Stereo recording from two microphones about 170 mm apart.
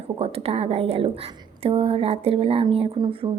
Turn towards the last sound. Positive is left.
turn(degrees=-30)  # may be behind; listen again after turning